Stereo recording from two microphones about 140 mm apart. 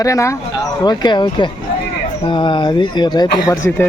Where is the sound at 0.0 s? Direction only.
20° left (ahead or behind).